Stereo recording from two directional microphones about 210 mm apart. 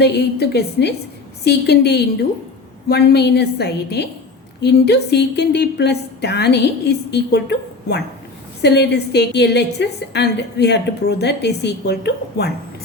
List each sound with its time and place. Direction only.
0.0 s a woman's voice: 50° left (ahead or behind)
8.6 s a woman's voice: 55° left (ahead or behind)